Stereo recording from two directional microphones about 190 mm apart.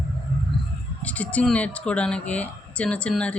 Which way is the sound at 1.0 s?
10° left (ahead or behind).